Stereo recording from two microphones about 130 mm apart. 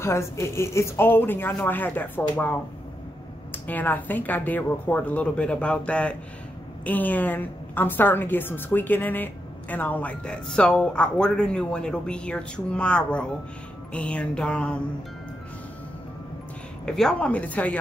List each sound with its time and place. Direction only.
0.0 s a woman's voice: 20° left (ahead or behind)
3.5 s a woman's voice: 15° left (ahead or behind)
16.8 s a woman's voice: 5° left (ahead or behind)